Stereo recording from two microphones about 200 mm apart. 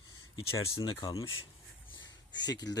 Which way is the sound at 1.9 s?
70° left (ahead or behind).